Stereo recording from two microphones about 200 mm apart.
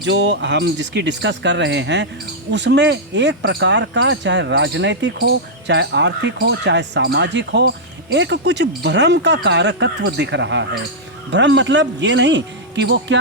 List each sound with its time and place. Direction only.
0.0 s speech: 65° right (ahead or behind)